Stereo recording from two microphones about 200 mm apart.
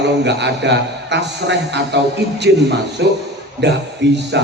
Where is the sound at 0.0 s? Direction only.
60° right (ahead or behind).